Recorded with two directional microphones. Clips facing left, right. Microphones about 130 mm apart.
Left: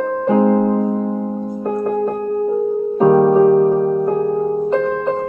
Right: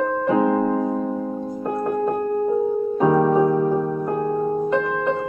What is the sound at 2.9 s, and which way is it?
Music, 30° left (ahead or behind).